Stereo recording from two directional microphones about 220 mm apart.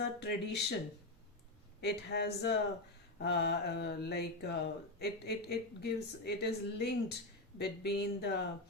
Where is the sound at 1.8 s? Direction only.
50° left (ahead or behind).